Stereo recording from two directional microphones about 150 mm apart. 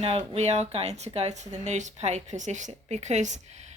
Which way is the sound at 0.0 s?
45° right (ahead or behind).